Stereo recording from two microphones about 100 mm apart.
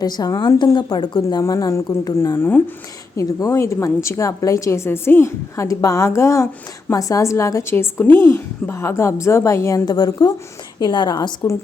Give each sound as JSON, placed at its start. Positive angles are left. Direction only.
{"t": 0.0, "sound": "a woman's voice", "side_deg": 40}